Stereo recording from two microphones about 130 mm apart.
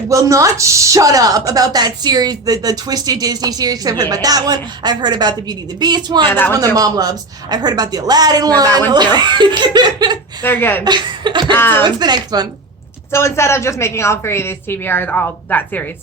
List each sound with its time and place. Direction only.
0.1 s a woman's voice: 25° right (ahead or behind)
6.2 s speech: 15° left (ahead or behind)
6.7 s a woman's voice: 30° right (ahead or behind)
10.4 s speech: 15° left (ahead or behind)
10.8 s speech: 35° right (ahead or behind)
11.5 s speech: 15° left (ahead or behind)
11.8 s speech: 35° right (ahead or behind)
13.1 s a woman's voice: 20° left (ahead or behind)